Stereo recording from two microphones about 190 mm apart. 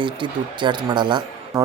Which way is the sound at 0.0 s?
25° right (ahead or behind).